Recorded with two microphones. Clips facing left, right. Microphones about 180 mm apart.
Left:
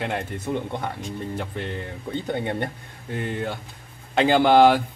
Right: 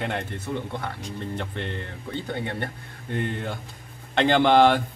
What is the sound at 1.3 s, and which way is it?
Speech, 5° left (ahead or behind).